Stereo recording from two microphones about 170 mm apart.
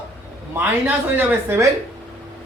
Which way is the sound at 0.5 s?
10° right (ahead or behind).